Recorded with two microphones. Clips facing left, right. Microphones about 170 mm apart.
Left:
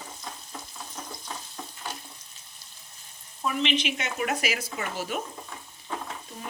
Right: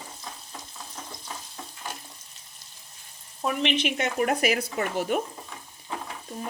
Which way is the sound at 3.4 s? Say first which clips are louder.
Right 1 dB; 55° right (ahead or behind).